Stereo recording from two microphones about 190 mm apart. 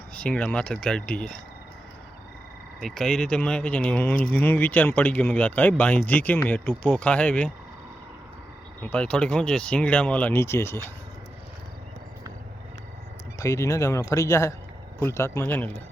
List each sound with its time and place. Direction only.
0.1 s speech: 5° left (ahead or behind)
2.8 s speech: centre (ahead or behind)
8.8 s speech: 5° left (ahead or behind)
13.4 s speech: 15° left (ahead or behind)